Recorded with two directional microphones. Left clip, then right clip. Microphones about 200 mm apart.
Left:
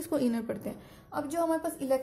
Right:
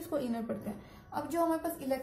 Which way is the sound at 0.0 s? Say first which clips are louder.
Left 5 dB; 45° left (ahead or behind).